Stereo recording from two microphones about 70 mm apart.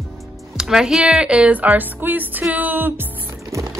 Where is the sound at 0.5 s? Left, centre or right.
Centre; by 3.0 s right.